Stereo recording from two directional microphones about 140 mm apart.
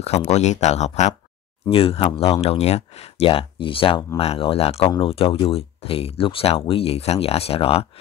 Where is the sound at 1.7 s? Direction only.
45° left (ahead or behind).